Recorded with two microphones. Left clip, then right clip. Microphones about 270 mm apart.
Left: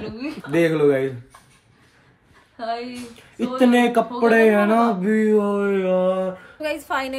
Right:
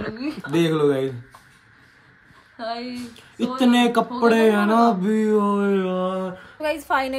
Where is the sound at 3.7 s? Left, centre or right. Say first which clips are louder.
Left 1 dB; centre.